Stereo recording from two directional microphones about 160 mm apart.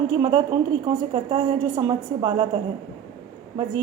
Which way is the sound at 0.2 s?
30° right (ahead or behind).